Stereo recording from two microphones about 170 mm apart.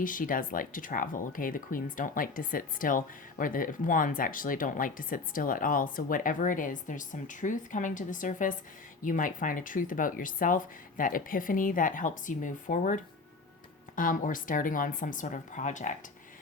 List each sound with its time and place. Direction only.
0.0 s speech: 55° left (ahead or behind)